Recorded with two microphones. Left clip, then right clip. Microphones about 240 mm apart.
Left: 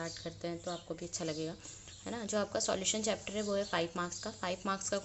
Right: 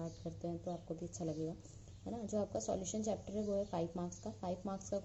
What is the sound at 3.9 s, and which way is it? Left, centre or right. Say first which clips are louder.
Speech: left 7 dB; left.